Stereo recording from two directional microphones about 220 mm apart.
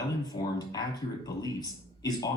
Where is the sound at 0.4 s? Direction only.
20° left (ahead or behind).